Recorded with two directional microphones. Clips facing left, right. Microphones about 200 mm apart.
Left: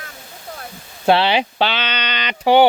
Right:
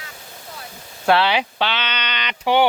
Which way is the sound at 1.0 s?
25° left (ahead or behind).